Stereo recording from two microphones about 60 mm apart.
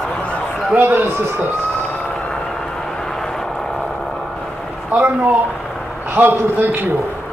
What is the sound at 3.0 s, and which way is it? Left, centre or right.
Vehicle, centre.